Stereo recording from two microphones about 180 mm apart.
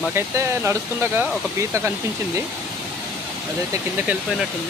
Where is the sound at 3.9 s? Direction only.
10° right (ahead or behind).